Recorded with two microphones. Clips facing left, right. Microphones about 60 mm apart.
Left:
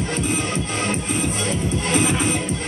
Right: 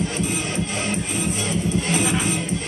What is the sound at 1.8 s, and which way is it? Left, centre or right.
Music, left.